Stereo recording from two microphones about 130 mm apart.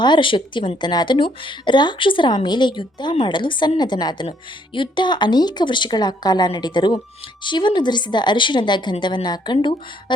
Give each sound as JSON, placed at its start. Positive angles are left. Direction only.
{"t": 0.0, "sound": "a woman's voice", "side_deg": 40}